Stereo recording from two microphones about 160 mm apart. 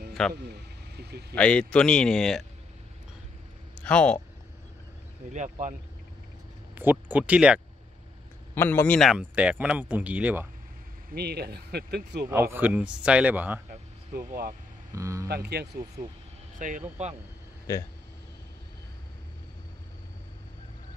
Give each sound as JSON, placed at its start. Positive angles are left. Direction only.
{"t": 0.3, "sound": "vehicle", "side_deg": -90}
{"t": 1.3, "sound": "a man's voice", "side_deg": 5}
{"t": 3.8, "sound": "a man's voice", "side_deg": 10}
{"t": 5.3, "sound": "speech", "side_deg": -50}
{"t": 6.7, "sound": "speech", "side_deg": -10}
{"t": 8.5, "sound": "a man's voice", "side_deg": 15}
{"t": 9.1, "sound": "speech", "side_deg": -10}
{"t": 11.1, "sound": "speech", "side_deg": -90}
{"t": 12.3, "sound": "speech", "side_deg": -15}
{"t": 14.1, "sound": "speech", "side_deg": -70}
{"t": 15.0, "sound": "speech", "side_deg": -20}
{"t": 15.2, "sound": "speech", "side_deg": -85}
{"t": 16.5, "sound": "speech", "side_deg": -55}